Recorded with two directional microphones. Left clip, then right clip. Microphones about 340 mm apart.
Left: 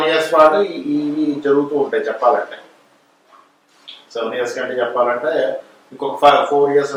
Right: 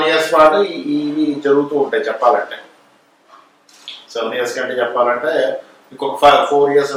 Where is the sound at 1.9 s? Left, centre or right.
Centre.